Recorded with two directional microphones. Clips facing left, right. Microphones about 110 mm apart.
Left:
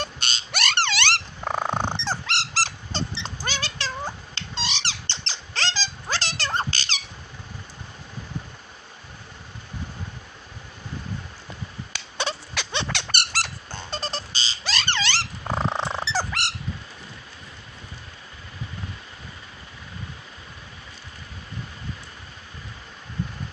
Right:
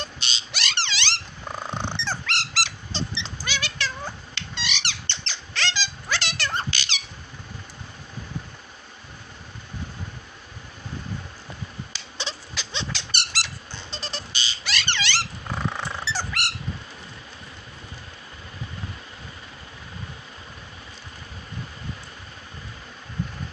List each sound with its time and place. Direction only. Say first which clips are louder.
0.0 s purr: left 3 dB; 50° left (ahead or behind)
1.9 s dog: left 2 dB; 35° left (ahead or behind)
11.9 s squeak: left 8 dB; 60° left (ahead or behind); by 15.1 s 40° left (ahead or behind)
15.4 s squawk: left 8 dB; 35° left (ahead or behind)